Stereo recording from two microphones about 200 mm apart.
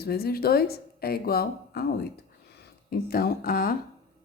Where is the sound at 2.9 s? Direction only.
50° left (ahead or behind).